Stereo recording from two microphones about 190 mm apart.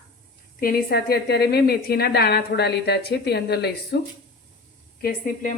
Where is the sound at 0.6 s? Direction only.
50° left (ahead or behind).